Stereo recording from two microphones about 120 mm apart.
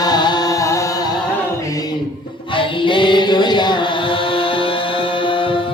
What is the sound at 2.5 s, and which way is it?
Chant, 45° left (ahead or behind).